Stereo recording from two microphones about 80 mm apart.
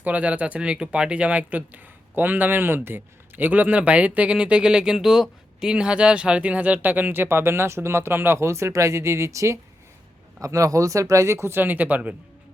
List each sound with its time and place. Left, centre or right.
0.0 s speech: centre